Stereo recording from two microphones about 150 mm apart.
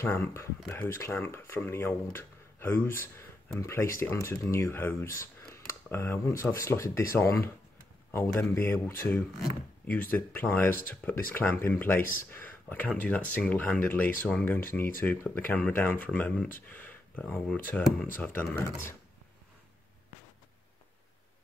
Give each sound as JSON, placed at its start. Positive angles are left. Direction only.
{"t": 0.0, "sound": "speech", "side_deg": 15}
{"t": 5.2, "sound": "a sound", "side_deg": 15}
{"t": 6.4, "sound": "speech", "side_deg": 15}
{"t": 12.0, "sound": "speech", "side_deg": 65}
{"t": 12.3, "sound": "speech", "side_deg": 15}